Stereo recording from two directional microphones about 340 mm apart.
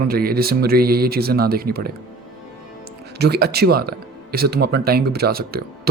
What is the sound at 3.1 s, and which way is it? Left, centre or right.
Speech, right.